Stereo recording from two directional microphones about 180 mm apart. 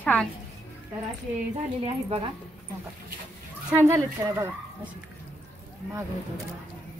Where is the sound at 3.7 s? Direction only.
15° right (ahead or behind).